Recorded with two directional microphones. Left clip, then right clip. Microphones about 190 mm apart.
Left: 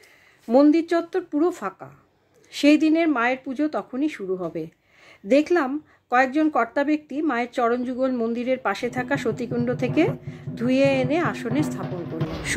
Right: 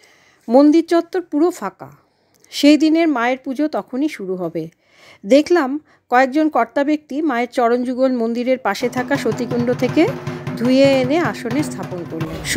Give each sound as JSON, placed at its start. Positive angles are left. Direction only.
{"t": 0.5, "sound": "speech", "side_deg": -45}